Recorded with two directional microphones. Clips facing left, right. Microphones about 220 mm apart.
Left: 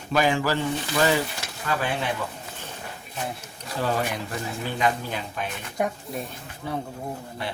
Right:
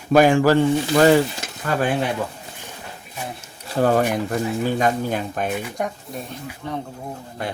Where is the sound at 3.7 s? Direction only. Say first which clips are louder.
Right 8 dB; 50° right (ahead or behind).